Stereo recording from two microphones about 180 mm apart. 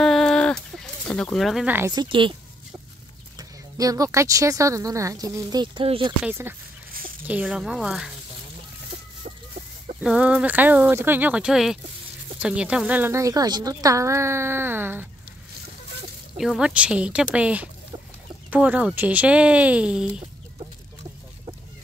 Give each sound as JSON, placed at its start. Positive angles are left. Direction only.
{"t": 0.0, "sound": "a sound", "side_deg": 5}
{"t": 1.8, "sound": "speech", "side_deg": -25}
{"t": 3.3, "sound": "speech", "side_deg": -20}
{"t": 6.2, "sound": "speech", "side_deg": -10}
{"t": 9.9, "sound": "speech", "side_deg": -5}
{"t": 16.3, "sound": "speech", "side_deg": 0}